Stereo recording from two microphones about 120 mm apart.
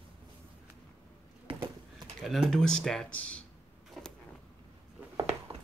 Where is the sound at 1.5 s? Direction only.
50° right (ahead or behind).